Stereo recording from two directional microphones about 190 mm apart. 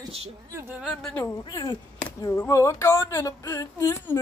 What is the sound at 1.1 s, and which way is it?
Speech, 20° left (ahead or behind).